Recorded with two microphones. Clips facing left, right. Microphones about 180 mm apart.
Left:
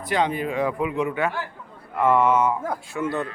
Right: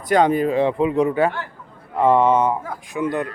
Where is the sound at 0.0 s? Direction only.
45° right (ahead or behind); by 2.6 s 30° right (ahead or behind).